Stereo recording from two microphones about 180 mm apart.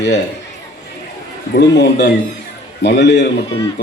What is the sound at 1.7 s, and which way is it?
A man's voice, 70° left (ahead or behind).